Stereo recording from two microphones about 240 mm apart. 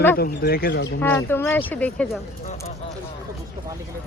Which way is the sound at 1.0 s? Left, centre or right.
Centre.